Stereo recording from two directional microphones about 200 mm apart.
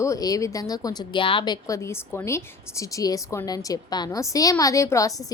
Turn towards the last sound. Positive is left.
turn(degrees=15)  # may be behind; listen again after turning